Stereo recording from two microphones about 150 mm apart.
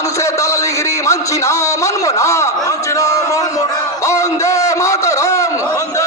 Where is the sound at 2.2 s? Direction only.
20° left (ahead or behind).